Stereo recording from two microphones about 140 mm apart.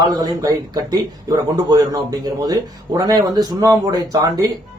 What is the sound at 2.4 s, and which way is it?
Speech, 25° right (ahead or behind).